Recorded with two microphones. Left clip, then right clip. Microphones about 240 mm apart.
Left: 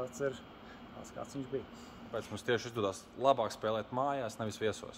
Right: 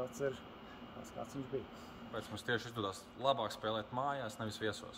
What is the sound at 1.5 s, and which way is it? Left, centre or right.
Speech, centre.